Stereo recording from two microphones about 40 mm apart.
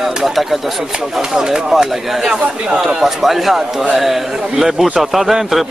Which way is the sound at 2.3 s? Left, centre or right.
Right.